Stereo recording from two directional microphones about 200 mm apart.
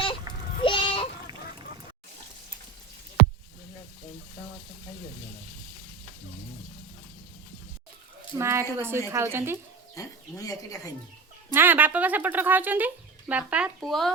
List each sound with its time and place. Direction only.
0.6 s a sound: 25° left (ahead or behind)
8.4 s speech: 15° right (ahead or behind)
9.9 s speech: 15° left (ahead or behind)
11.5 s speech: 10° right (ahead or behind)